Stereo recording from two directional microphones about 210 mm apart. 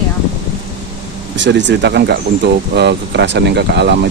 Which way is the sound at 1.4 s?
55° right (ahead or behind).